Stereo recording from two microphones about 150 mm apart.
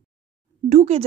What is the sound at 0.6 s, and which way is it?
Speech, 45° right (ahead or behind).